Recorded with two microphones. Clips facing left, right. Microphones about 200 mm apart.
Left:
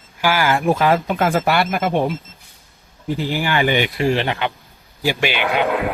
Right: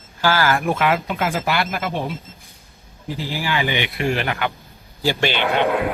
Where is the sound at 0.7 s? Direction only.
35° left (ahead or behind).